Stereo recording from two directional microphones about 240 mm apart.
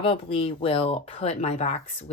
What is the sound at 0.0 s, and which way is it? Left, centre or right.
Speech, left.